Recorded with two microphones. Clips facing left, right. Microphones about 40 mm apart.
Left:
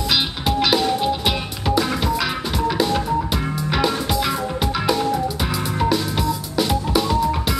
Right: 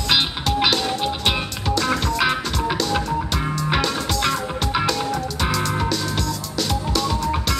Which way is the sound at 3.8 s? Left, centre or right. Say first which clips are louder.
Left 2 dB; centre.